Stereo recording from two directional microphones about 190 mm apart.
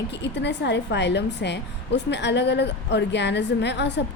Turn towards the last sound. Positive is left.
turn(degrees=65)  # may be behind; listen again after turning